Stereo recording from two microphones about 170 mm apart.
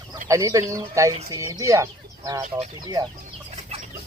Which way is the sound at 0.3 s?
20° right (ahead or behind).